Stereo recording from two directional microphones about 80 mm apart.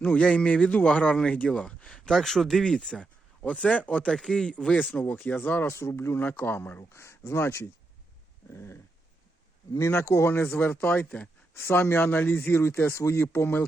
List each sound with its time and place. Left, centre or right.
0.0 s a man's voice: centre
4.9 s speech: left
8.4 s dog: left
9.7 s speech: left